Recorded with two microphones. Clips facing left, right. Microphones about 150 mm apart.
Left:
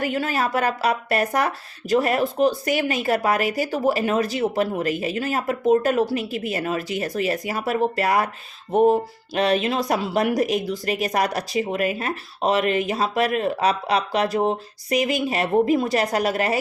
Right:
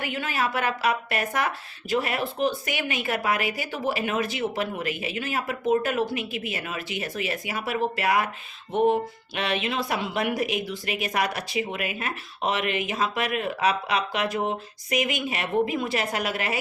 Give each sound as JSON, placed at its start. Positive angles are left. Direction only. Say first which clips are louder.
{"t": 0.0, "sound": "speech", "louder": "left 5 dB", "side_deg": 40}